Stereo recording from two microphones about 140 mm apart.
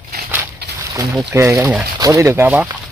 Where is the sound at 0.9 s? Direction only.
20° right (ahead or behind).